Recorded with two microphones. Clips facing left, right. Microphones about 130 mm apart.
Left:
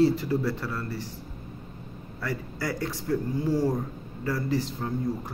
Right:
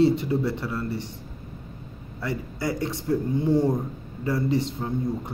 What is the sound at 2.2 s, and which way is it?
A man's voice, 25° right (ahead or behind).